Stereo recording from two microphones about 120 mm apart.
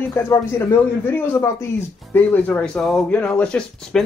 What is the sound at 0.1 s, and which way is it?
A man's voice, 25° left (ahead or behind).